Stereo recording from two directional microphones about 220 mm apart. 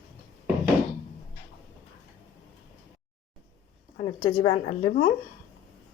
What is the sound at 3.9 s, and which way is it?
Speech, 30° left (ahead or behind).